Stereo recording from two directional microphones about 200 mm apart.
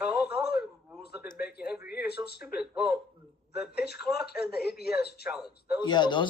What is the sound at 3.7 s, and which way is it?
Speech, 55° left (ahead or behind).